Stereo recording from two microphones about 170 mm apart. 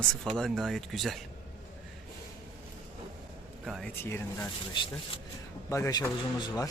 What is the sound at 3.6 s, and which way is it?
Speech, centre (ahead or behind).